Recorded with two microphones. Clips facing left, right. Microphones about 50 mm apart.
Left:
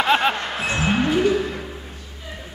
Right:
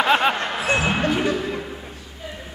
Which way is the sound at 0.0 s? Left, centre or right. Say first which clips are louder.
Even; centre.